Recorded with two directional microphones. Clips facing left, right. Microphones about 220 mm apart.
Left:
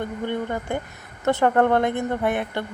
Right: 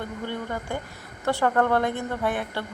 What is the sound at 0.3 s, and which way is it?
A woman's voice, 20° left (ahead or behind).